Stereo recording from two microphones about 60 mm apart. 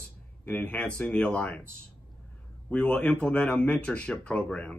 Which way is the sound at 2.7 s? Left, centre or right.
Centre.